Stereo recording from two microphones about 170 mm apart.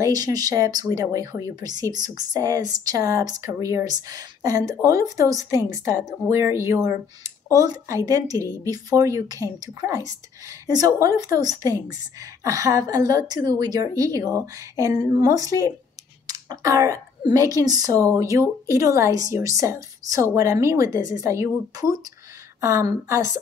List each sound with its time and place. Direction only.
0.0 s a woman's voice: 20° right (ahead or behind)
16.3 s clicking: 20° right (ahead or behind)
17.3 s a woman's voice: 20° right (ahead or behind)